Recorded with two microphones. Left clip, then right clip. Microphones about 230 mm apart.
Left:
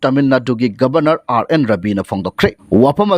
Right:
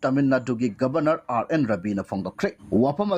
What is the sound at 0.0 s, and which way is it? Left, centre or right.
Speech, left.